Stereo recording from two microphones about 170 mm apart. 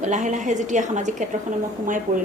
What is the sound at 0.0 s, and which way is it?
A woman's voice, 45° right (ahead or behind).